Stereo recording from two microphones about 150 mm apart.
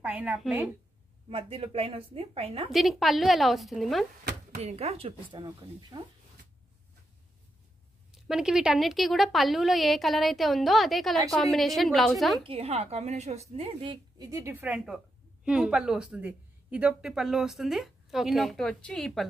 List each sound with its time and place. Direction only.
0.0 s a sound: 10° right (ahead or behind)
0.4 s speech: 5° right (ahead or behind)
1.3 s speech: 40° right (ahead or behind)
2.7 s speech: centre (ahead or behind)
4.6 s speech: 45° right (ahead or behind); by 6.0 s 25° right (ahead or behind)
8.1 s speech: 5° right (ahead or behind)
12.4 s speech: 40° right (ahead or behind)
14.1 s a woman's voice: 25° right (ahead or behind); by 19.2 s 5° left (ahead or behind)